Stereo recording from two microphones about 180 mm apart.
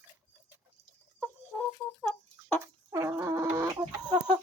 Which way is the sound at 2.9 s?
15° right (ahead or behind).